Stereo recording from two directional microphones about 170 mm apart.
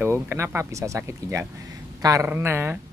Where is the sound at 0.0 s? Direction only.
15° right (ahead or behind).